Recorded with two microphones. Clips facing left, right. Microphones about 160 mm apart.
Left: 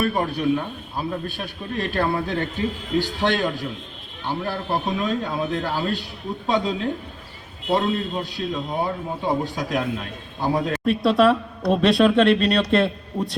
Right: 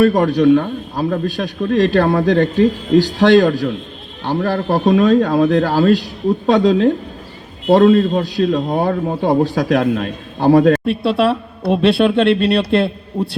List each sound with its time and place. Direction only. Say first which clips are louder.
0.0 s a man's voice: right 10 dB; 90° right
11.2 s a woman's voice: right 1 dB; 30° right (ahead or behind)